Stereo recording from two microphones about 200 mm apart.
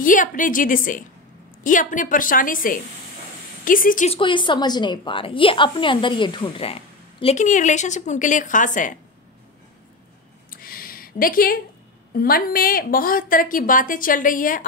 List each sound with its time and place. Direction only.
0.0 s a woman's voice: 40° left (ahead or behind)
4.1 s a woman's voice: 25° left (ahead or behind); by 8.9 s 40° left (ahead or behind)
10.5 s a sound: 45° left (ahead or behind)
12.2 s a woman's voice: 45° left (ahead or behind)